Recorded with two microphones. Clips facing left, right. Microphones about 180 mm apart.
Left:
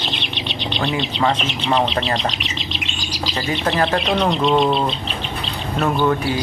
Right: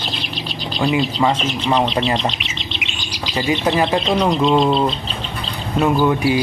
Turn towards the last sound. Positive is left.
turn(degrees=-10)  # may be behind; listen again after turning